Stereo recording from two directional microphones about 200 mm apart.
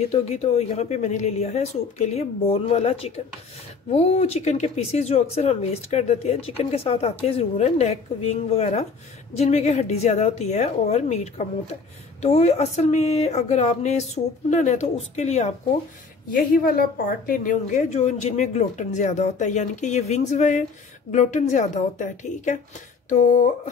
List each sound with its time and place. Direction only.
0.1 s a woman's voice: 35° left (ahead or behind)